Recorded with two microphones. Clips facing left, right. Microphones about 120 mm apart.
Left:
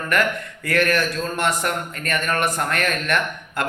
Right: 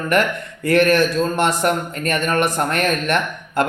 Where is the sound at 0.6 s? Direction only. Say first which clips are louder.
Right 6 dB; 25° right (ahead or behind).